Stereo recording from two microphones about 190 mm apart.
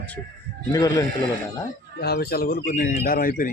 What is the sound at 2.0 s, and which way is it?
Speech, 55° left (ahead or behind).